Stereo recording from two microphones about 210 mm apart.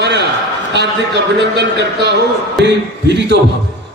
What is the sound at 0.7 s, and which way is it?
A man's voice, 55° right (ahead or behind).